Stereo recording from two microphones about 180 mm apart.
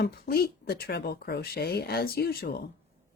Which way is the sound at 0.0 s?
60° left (ahead or behind).